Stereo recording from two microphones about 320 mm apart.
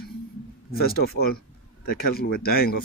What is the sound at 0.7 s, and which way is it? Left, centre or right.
A man's voice, left.